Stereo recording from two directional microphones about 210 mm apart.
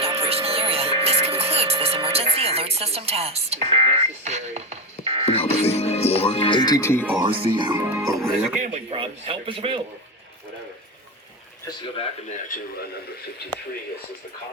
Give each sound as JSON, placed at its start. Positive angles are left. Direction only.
{"t": 0.0, "sound": "music", "side_deg": -30}
{"t": 5.2, "sound": "speech", "side_deg": 30}
{"t": 7.1, "sound": "a man's voice", "side_deg": -20}
{"t": 8.1, "sound": "speech", "side_deg": 0}
{"t": 8.6, "sound": "a man's voice", "side_deg": -30}